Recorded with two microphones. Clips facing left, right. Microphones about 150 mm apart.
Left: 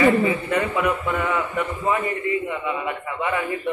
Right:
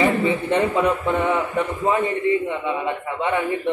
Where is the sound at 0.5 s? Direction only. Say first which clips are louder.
Right 3 dB; 25° right (ahead or behind).